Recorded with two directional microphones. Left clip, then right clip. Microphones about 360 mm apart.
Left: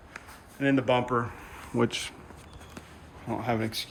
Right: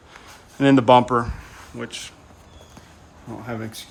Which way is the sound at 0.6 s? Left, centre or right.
Centre.